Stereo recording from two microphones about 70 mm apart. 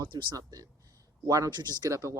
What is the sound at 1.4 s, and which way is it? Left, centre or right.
Speech, right.